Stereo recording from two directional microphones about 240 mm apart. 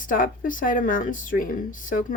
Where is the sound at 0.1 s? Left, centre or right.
Left.